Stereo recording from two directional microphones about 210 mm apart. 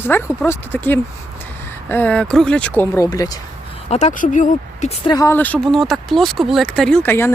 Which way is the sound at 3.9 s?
35° left (ahead or behind).